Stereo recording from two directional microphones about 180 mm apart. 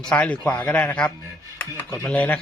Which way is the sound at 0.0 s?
5° left (ahead or behind).